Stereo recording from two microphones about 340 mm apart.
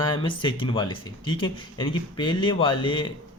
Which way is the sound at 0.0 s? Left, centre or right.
Centre.